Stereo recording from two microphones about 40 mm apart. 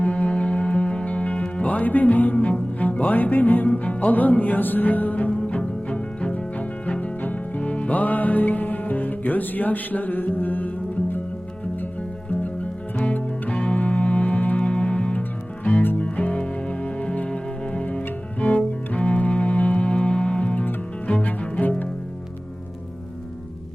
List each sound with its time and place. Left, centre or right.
0.0 s music: left
1.8 s music: left
3.7 s music: left
5.3 s music: left
13.1 s music: left
15.6 s music: left
16.0 s music: left
17.9 s cello: left